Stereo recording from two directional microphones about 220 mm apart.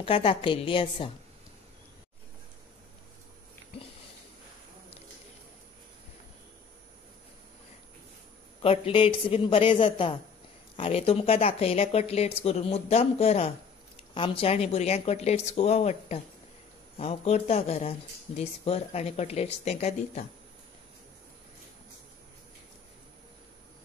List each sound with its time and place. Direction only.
0.0 s speech: 25° left (ahead or behind)
8.5 s speech: 25° left (ahead or behind)